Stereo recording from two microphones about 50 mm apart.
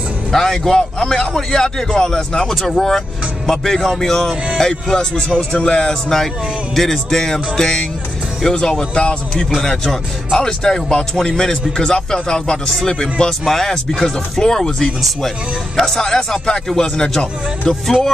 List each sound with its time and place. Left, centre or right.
0.3 s speech: centre
6.7 s speech: centre